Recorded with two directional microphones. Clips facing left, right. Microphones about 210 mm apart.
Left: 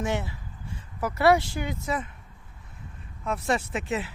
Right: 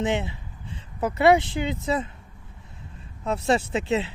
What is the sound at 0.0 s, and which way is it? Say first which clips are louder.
Speech: right 4 dB; 20° right (ahead or behind).